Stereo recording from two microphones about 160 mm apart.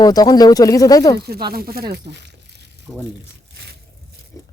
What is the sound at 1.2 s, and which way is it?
Speech, 80° right.